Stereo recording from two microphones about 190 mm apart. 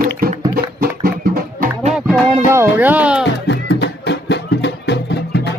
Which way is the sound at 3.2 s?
65° left (ahead or behind).